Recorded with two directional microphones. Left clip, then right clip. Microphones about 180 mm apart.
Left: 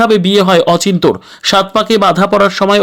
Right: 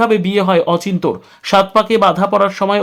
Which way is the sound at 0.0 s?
25° left (ahead or behind).